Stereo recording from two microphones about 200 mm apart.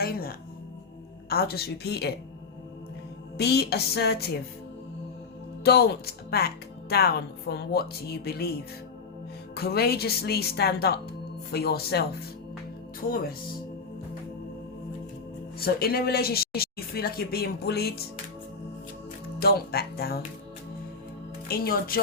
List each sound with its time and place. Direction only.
0.0 s a woman's voice: 50° left (ahead or behind)
3.3 s a woman's voice: 55° left (ahead or behind)
5.6 s a woman's voice: 55° left (ahead or behind)
13.1 s a woman's voice: 45° left (ahead or behind)
15.5 s a woman's voice: 50° left (ahead or behind)
19.4 s a woman's voice: 50° left (ahead or behind)
21.4 s a woman's voice: 50° left (ahead or behind)